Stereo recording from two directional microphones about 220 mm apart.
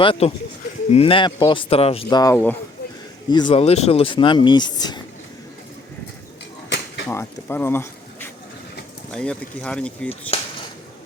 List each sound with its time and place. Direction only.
0.0 s speech: 25° left (ahead or behind)
3.2 s speech: 20° left (ahead or behind)
7.1 s speech: 10° left (ahead or behind)